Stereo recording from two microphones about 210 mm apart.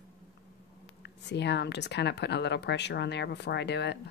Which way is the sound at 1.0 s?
55° left (ahead or behind).